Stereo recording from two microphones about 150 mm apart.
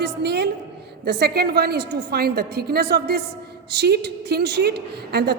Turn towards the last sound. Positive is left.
turn(degrees=-90)